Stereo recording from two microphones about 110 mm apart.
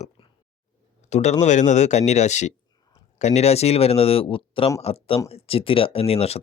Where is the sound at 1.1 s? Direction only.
90° left; by 4.7 s 55° left (ahead or behind).